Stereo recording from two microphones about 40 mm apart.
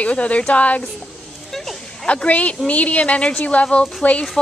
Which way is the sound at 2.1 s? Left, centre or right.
Left.